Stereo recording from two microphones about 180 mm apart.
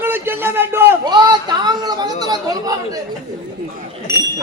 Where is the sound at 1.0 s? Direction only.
25° right (ahead or behind).